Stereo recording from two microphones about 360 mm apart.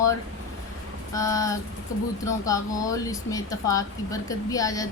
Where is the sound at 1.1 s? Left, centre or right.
Centre.